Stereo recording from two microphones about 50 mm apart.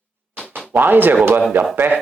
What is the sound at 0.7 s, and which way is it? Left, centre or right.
Speech, right.